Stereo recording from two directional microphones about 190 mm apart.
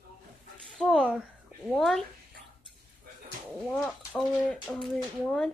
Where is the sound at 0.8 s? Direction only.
Centre (ahead or behind).